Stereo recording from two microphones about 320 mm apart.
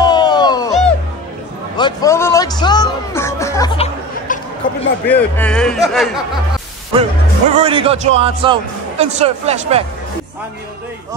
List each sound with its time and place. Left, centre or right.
0.0 s music: centre
1.8 s music: centre
5.0 s speech: centre
6.9 s speech: centre